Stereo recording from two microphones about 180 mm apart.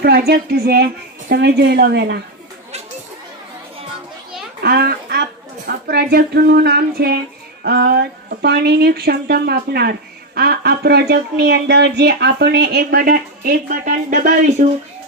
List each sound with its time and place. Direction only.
0.0 s speech: 65° right (ahead or behind)
4.6 s speech: 60° right (ahead or behind); by 14.7 s 45° right (ahead or behind)